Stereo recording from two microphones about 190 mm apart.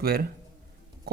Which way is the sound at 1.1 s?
55° right (ahead or behind).